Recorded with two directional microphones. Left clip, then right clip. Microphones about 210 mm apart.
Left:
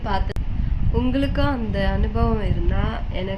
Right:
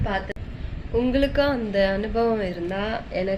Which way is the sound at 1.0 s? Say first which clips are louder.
Right 3 dB; 10° left (ahead or behind).